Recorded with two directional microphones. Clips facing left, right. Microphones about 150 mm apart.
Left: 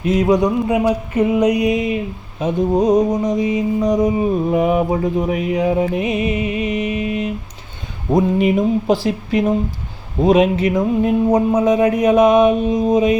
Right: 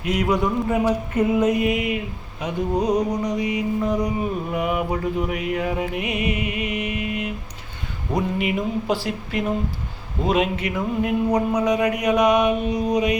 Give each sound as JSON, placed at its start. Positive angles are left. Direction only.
{"t": 0.1, "sound": "mantra", "side_deg": 25}
{"t": 1.5, "sound": "mantra", "side_deg": 20}
{"t": 8.1, "sound": "speech", "side_deg": 40}
{"t": 10.6, "sound": "mantra", "side_deg": 30}